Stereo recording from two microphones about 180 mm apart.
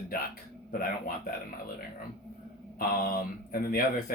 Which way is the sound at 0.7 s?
50° left (ahead or behind).